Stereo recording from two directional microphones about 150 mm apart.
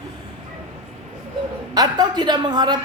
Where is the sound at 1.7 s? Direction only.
25° right (ahead or behind).